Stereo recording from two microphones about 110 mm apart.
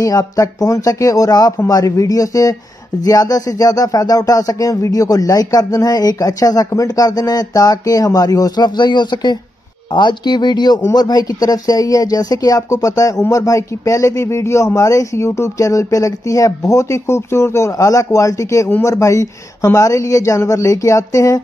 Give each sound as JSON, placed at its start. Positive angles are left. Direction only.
{"t": 0.0, "sound": "speech", "side_deg": 30}